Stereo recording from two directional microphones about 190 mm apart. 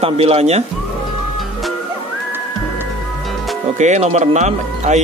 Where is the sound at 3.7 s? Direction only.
40° right (ahead or behind).